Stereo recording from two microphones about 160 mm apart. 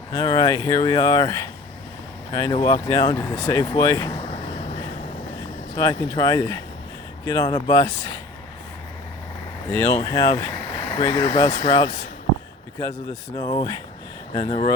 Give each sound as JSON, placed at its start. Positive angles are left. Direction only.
{"t": 0.1, "sound": "speech", "side_deg": 20}
{"t": 5.7, "sound": "speech", "side_deg": 20}
{"t": 9.6, "sound": "speech", "side_deg": 15}
{"t": 13.3, "sound": "speech", "side_deg": 25}